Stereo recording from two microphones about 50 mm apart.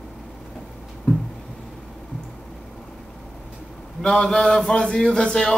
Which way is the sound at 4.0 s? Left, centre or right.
Centre.